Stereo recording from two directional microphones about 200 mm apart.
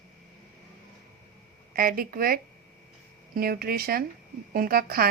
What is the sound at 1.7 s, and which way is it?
A woman's voice, 45° right (ahead or behind).